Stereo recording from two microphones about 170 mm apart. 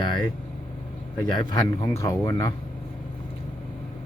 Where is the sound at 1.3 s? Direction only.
20° left (ahead or behind).